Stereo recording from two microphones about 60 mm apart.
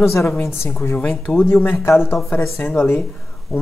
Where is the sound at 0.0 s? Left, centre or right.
Left.